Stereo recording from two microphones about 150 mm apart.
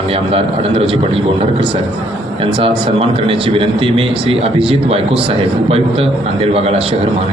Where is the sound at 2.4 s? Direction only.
35° right (ahead or behind).